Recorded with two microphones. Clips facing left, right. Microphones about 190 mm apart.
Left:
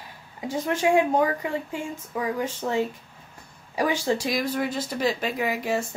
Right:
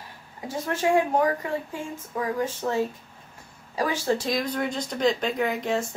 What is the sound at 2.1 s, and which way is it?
Speech, 15° left (ahead or behind).